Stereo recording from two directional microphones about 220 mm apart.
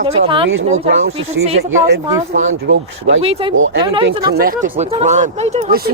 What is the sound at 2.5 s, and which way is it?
Speech, 60° right (ahead or behind).